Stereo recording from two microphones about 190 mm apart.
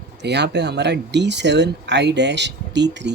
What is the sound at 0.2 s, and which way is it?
Speech, 65° right (ahead or behind).